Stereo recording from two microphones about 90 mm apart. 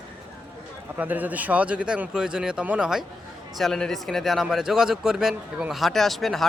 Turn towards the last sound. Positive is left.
turn(degrees=0)  # may be behind; listen again after turning